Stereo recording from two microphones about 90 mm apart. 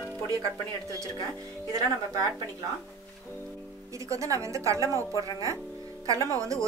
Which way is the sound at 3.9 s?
35° right (ahead or behind).